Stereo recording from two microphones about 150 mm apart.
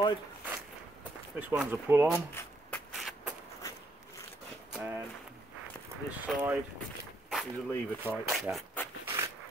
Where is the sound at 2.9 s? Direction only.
Centre (ahead or behind).